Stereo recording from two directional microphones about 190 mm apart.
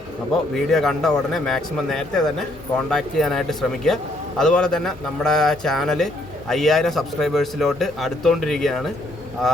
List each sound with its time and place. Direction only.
0.5 s a man's voice: centre (ahead or behind)